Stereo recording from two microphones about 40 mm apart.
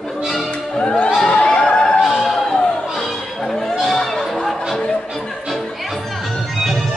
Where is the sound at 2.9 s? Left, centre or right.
Centre.